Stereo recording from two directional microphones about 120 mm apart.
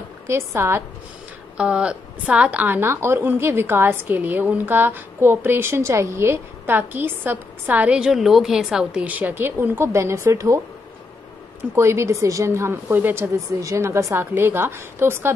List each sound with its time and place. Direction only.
0.3 s a woman's voice: 20° right (ahead or behind)
1.6 s a woman's voice: 10° right (ahead or behind); by 10.6 s 25° right (ahead or behind)
11.7 s a woman's voice: 25° right (ahead or behind)